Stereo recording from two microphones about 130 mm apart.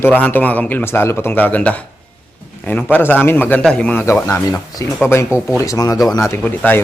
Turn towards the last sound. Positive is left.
turn(degrees=15)  # may be behind; listen again after turning